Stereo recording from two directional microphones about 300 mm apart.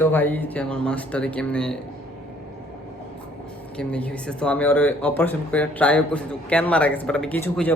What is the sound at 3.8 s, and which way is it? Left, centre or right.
Speech, centre.